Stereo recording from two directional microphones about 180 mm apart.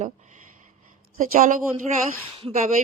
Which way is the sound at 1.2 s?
45° right (ahead or behind).